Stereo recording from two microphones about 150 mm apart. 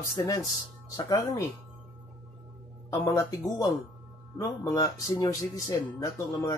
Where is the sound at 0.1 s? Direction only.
25° left (ahead or behind).